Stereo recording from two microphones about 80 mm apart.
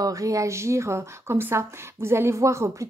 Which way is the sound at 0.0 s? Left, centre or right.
Right.